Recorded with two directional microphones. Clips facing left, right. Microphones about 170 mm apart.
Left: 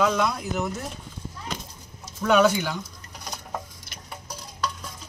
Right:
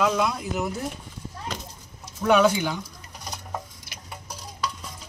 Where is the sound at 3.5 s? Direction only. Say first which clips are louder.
Left 1 dB; 5° right (ahead or behind).